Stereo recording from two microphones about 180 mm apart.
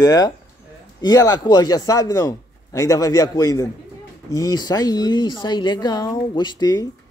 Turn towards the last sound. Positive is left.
turn(degrees=20)  # may be behind; listen again after turning